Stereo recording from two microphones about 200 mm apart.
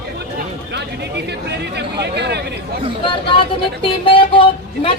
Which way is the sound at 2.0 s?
55° right (ahead or behind).